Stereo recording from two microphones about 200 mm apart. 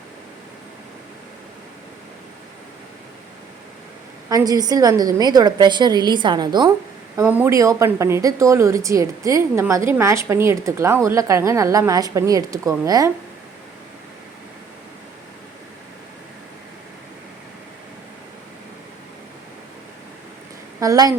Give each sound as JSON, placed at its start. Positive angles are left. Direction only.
{"t": 4.3, "sound": "a woman's voice", "side_deg": -20}
{"t": 7.2, "sound": "a woman's voice", "side_deg": -10}
{"t": 20.7, "sound": "speech", "side_deg": -15}